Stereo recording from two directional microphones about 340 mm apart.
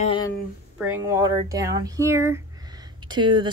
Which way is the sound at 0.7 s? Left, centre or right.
Centre.